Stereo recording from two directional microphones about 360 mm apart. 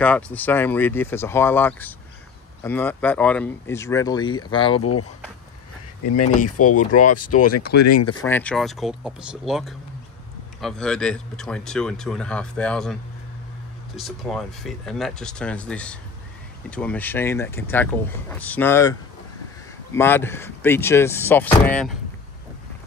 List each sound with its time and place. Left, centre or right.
0.0 s speech: centre
6.4 s speech: left
8.2 s speech: centre
13.9 s speech: centre